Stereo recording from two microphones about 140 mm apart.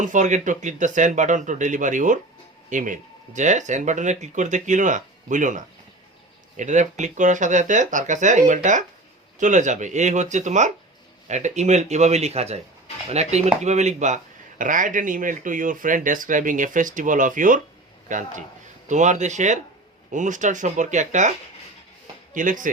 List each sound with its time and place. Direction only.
0.0 s speech: 60° right (ahead or behind)
14.6 s speech: 70° right (ahead or behind)
22.4 s speech: 70° right (ahead or behind)